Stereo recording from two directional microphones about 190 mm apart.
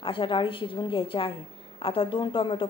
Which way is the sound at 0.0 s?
25° left (ahead or behind).